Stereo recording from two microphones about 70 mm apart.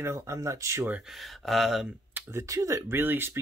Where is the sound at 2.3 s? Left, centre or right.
Right.